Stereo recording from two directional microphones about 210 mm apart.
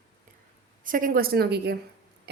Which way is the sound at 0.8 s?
40° right (ahead or behind).